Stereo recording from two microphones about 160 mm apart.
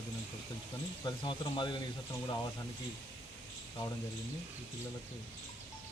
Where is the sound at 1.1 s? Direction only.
30° left (ahead or behind).